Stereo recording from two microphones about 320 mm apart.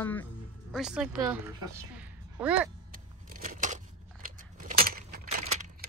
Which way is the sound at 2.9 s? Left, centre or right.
Right.